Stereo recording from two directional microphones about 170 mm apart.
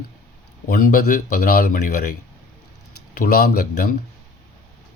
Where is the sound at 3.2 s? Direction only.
65° left (ahead or behind).